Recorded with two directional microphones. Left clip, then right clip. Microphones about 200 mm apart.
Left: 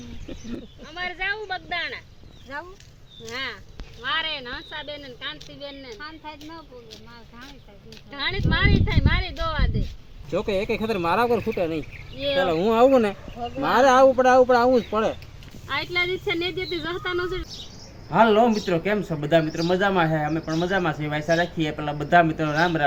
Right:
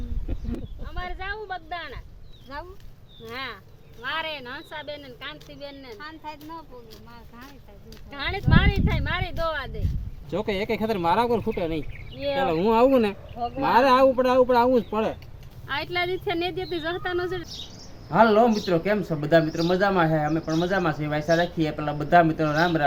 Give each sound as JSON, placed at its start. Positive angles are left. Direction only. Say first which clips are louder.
{"t": 0.9, "sound": "speech", "louder": "left 6 dB", "side_deg": 35}
{"t": 3.2, "sound": "speech", "louder": "left 3 dB", "side_deg": -15}
{"t": 8.1, "sound": "speech", "louder": "even", "side_deg": -35}
{"t": 18.1, "sound": "a man's voice", "louder": "left 1 dB", "side_deg": -5}